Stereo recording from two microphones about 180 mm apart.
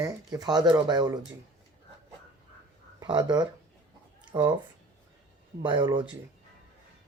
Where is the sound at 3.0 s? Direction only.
25° right (ahead or behind).